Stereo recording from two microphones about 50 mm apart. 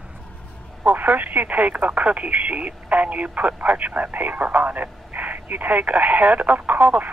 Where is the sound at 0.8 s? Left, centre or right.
Right.